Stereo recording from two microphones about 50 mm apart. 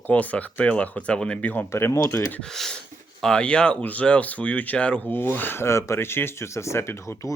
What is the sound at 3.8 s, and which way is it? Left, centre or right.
Speech, left.